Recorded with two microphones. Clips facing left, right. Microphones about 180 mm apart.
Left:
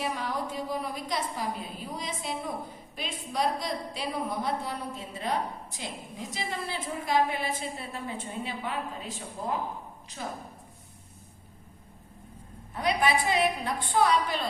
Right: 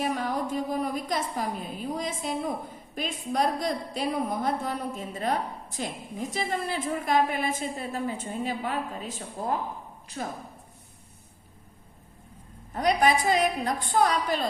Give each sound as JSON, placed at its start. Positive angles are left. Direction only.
{"t": 0.0, "sound": "a woman's voice", "side_deg": -45}
{"t": 12.7, "sound": "a woman's voice", "side_deg": -45}